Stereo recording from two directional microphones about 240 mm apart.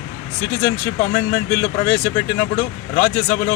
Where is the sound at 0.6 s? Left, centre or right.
Left.